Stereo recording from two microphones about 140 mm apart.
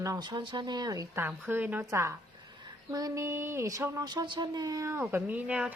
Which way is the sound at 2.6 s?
25° right (ahead or behind).